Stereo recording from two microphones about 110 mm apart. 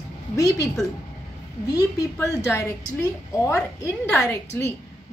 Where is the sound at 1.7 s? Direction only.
35° left (ahead or behind).